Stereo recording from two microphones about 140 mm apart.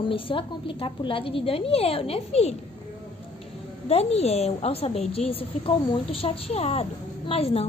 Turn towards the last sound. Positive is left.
turn(degrees=45)  # may be behind; listen again after turning